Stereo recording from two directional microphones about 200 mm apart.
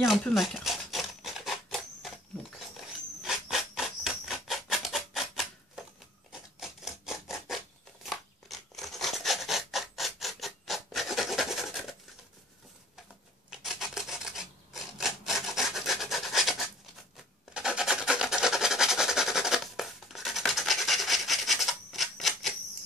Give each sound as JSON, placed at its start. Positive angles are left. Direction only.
{"t": 0.0, "sound": "a sound", "side_deg": 0}
{"t": 3.2, "sound": "a sound", "side_deg": 0}
{"t": 6.6, "sound": "rub", "side_deg": 0}
{"t": 8.0, "sound": "filing", "side_deg": 0}
{"t": 13.5, "sound": "filing", "side_deg": 0}
{"t": 17.6, "sound": "rub", "side_deg": -5}